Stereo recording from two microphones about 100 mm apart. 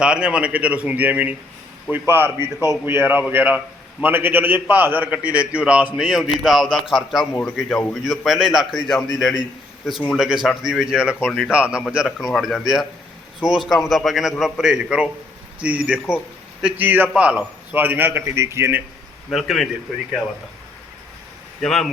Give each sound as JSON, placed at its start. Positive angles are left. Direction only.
{"t": 0.0, "sound": "a man's voice", "side_deg": -10}
{"t": 19.3, "sound": "a man's voice", "side_deg": 0}
{"t": 21.6, "sound": "a man's voice", "side_deg": 5}